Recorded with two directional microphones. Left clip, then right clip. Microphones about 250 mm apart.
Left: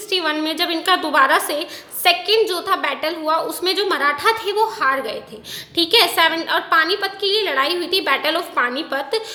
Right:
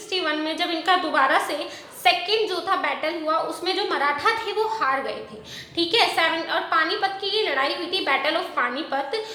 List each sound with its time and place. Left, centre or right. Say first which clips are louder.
0.1 s a woman's voice: left 4 dB; left